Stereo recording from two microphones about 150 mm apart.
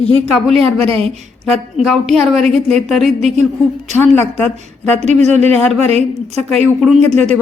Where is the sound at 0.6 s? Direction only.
40° right (ahead or behind).